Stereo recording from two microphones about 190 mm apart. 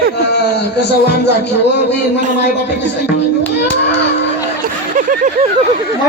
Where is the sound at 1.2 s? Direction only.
65° left (ahead or behind).